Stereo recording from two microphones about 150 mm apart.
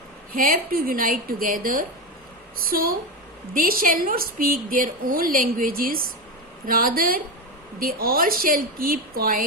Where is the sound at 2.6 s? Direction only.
80° right.